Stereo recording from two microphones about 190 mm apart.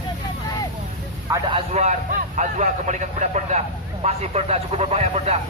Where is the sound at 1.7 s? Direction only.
35° right (ahead or behind).